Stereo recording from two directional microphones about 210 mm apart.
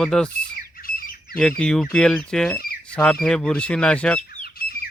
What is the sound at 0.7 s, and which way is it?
Bird, 45° left (ahead or behind).